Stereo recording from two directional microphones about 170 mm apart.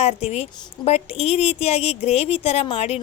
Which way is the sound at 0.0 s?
40° left (ahead or behind).